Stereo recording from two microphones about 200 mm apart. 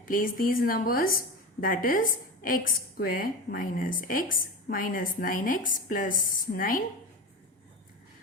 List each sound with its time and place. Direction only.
0.0 s a woman's voice: 45° left (ahead or behind)